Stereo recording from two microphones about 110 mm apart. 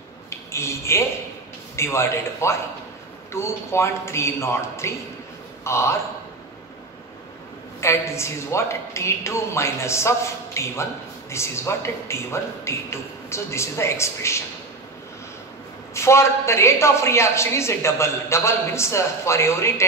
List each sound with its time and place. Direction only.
0.3 s a sound: 25° left (ahead or behind)
1.8 s a woman's voice: 25° left (ahead or behind)
7.8 s a woman's voice: 25° left (ahead or behind)
15.9 s a woman's voice: 25° left (ahead or behind)